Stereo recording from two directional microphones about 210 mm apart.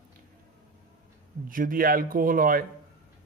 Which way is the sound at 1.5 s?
40° right (ahead or behind).